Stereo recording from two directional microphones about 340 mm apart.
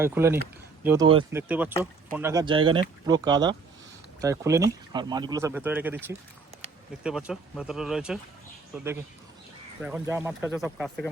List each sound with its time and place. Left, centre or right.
0.0 s speech: centre
9.8 s speech: centre